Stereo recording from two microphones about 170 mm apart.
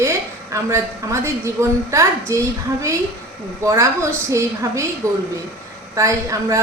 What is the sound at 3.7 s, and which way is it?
A woman's voice, 15° right (ahead or behind).